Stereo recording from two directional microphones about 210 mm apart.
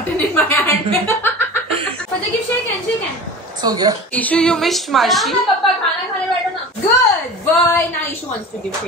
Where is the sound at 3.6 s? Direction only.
20° right (ahead or behind).